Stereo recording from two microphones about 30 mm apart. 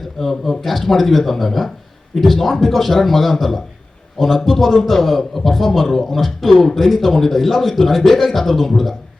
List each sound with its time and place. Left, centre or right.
0.2 s a man's voice: centre